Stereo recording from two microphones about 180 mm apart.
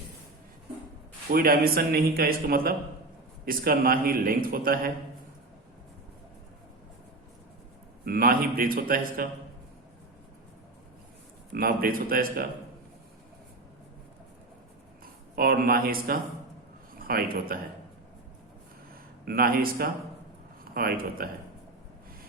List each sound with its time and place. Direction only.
1.3 s a man's voice: 55° right (ahead or behind)
8.0 s a man's voice: 55° right (ahead or behind)
11.5 s a man's voice: 55° right (ahead or behind)
15.4 s a man's voice: 55° right (ahead or behind)
19.2 s speech: 60° right (ahead or behind)